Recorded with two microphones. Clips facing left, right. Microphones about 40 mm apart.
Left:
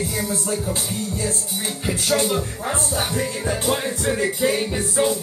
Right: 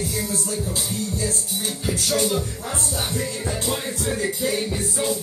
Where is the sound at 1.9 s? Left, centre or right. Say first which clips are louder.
Left 2 dB; left.